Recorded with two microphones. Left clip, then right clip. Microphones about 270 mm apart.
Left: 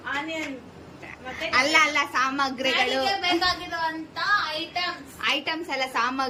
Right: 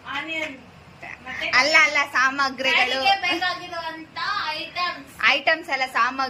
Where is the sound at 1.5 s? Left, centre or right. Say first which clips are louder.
Right 3 dB; centre.